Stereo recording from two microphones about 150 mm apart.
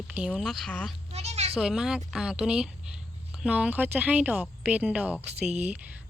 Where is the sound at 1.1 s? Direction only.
45° right (ahead or behind).